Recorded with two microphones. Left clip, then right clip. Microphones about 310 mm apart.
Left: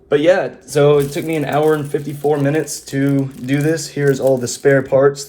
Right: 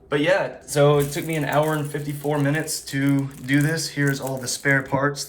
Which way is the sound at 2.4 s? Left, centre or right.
Centre.